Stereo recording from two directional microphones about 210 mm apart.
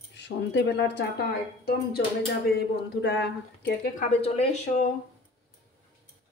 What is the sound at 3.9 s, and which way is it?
Speech, 30° left (ahead or behind).